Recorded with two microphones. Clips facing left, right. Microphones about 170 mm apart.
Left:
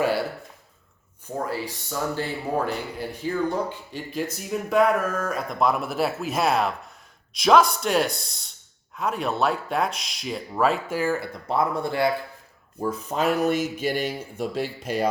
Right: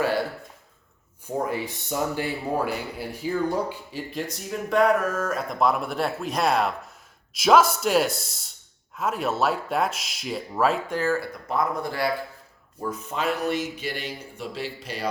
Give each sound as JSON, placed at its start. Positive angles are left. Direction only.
{"t": 1.5, "sound": "speech", "side_deg": -20}
{"t": 3.9, "sound": "speech", "side_deg": 0}
{"t": 11.2, "sound": "speech", "side_deg": 30}
{"t": 12.9, "sound": "speech", "side_deg": 40}